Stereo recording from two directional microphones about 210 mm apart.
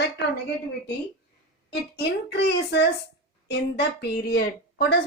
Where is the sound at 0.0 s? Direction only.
55° left (ahead or behind).